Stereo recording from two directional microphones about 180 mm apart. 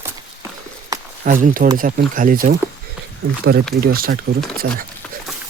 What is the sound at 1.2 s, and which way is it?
Speech, 50° right (ahead or behind).